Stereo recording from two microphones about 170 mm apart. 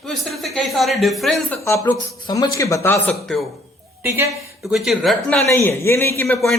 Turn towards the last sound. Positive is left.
turn(degrees=15)  # may be behind; listen again after turning